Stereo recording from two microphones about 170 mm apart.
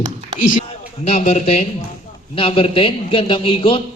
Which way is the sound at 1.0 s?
40° left (ahead or behind).